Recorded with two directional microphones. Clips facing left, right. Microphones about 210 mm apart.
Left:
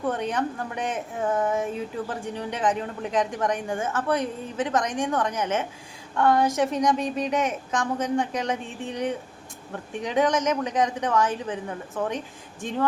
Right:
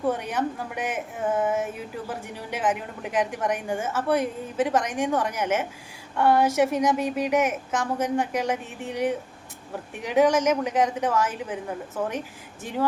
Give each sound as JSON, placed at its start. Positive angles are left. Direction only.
{"t": 0.0, "sound": "a woman's voice", "side_deg": -10}